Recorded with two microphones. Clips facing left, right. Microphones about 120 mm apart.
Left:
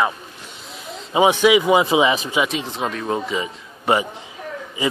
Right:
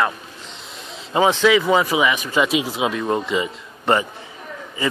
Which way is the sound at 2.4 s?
5° right (ahead or behind).